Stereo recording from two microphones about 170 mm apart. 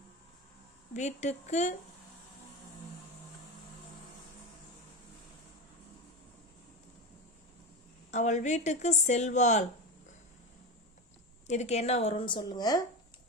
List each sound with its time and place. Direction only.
0.9 s a woman's voice: 45° left (ahead or behind)
8.1 s a woman's voice: 45° left (ahead or behind)
11.4 s a woman's voice: 40° left (ahead or behind); by 12.8 s 20° left (ahead or behind)